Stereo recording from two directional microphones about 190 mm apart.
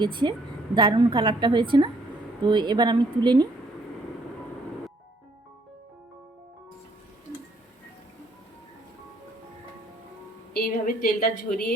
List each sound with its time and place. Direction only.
0.0 s a woman's voice: 25° right (ahead or behind)
10.5 s a woman's voice: 50° left (ahead or behind)